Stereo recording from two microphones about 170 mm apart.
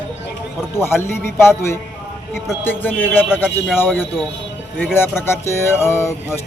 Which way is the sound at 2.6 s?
10° left (ahead or behind).